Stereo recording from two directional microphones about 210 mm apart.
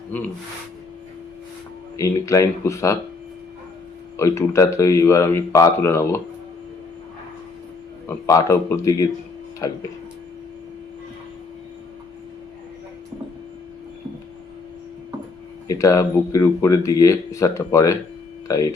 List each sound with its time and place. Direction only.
2.0 s speech: 15° left (ahead or behind)
4.2 s speech: 15° left (ahead or behind)
8.0 s speech: 15° left (ahead or behind)
15.6 s speech: 15° left (ahead or behind)